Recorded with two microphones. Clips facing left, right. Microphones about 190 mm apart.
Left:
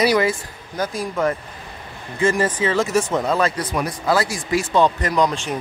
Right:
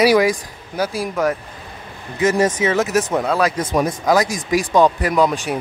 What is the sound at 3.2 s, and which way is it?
Speech, 5° right (ahead or behind).